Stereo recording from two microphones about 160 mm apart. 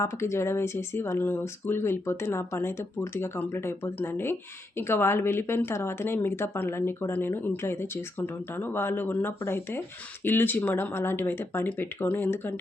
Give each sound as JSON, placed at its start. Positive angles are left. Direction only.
{"t": 0.0, "sound": "speech", "side_deg": 15}